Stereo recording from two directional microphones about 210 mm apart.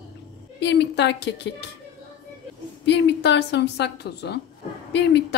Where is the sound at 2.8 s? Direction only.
55° left (ahead or behind).